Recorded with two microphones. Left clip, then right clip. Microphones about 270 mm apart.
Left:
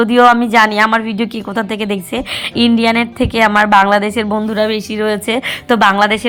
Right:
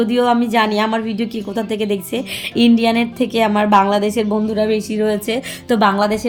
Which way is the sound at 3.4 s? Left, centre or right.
Left.